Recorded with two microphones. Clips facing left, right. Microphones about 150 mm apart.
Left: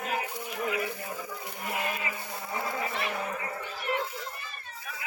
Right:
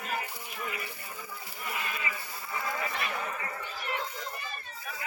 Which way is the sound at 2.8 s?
25° left (ahead or behind).